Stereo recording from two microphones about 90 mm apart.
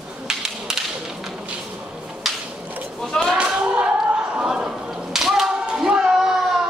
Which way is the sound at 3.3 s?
10° right (ahead or behind).